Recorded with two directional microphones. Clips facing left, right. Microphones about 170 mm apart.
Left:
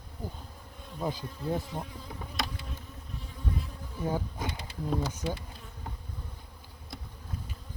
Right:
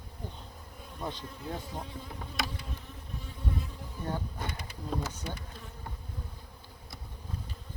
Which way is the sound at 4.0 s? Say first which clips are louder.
Left 4 dB; 10° left (ahead or behind).